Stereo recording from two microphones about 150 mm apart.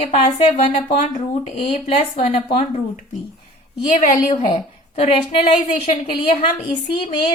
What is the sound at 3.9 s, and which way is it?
Speech, 55° left (ahead or behind).